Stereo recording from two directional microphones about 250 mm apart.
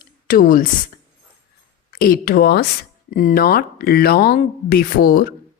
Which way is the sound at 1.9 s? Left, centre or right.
Left.